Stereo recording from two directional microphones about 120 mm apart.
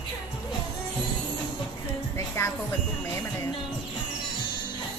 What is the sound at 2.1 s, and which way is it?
Music, 20° left (ahead or behind).